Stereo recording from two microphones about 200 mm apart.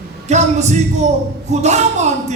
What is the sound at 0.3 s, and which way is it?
Speech, 35° right (ahead or behind).